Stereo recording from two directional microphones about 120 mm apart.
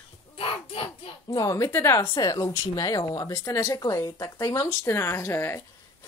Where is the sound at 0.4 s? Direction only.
50° left (ahead or behind).